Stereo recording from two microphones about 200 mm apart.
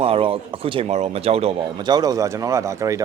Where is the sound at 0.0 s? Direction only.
25° right (ahead or behind).